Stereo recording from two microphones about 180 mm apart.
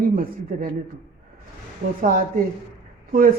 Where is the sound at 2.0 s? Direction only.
50° right (ahead or behind).